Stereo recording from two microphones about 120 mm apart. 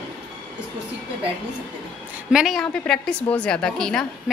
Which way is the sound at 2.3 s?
Centre (ahead or behind).